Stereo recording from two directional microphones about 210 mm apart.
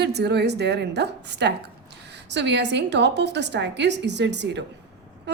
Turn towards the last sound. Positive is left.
turn(degrees=-55)  # may be behind; listen again after turning